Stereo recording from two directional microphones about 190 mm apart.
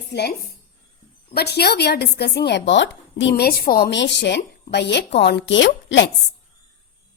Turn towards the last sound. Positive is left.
turn(degrees=70)  # may be behind; listen again after turning